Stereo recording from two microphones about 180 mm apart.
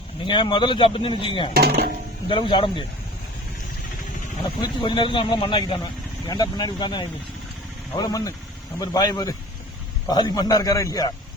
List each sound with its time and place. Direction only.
0.3 s speech: 25° left (ahead or behind)
1.5 s speech: 60° right (ahead or behind)
2.2 s speech: 25° left (ahead or behind)
4.6 s speech: 25° left (ahead or behind)